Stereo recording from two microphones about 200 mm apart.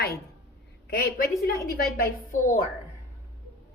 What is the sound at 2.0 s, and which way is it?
Speech, 40° left (ahead or behind).